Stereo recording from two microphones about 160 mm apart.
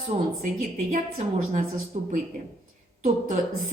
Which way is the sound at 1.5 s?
50° right (ahead or behind).